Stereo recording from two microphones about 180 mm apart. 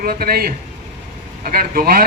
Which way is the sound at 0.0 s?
55° right (ahead or behind).